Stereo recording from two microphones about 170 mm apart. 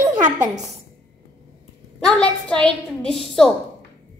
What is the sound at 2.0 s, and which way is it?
A woman's voice, 5° left (ahead or behind).